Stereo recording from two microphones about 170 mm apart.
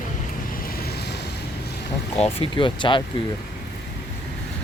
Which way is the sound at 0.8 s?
65° left (ahead or behind).